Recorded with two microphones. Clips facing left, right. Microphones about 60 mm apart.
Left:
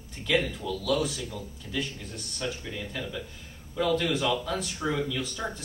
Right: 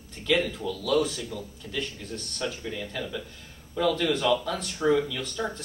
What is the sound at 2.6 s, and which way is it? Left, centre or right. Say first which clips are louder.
Speech: right 2 dB; centre.